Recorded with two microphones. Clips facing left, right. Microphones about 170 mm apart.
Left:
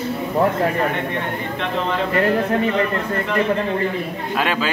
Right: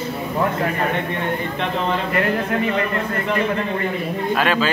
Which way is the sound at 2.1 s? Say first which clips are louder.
Left 2 dB; 30° left (ahead or behind).